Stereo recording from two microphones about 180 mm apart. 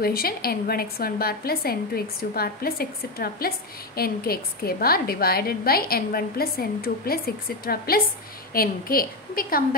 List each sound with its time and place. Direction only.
0.0 s a woman's voice: 55° left (ahead or behind)